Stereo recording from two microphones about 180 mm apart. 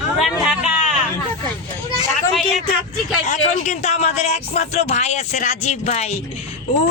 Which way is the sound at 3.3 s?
40° left (ahead or behind).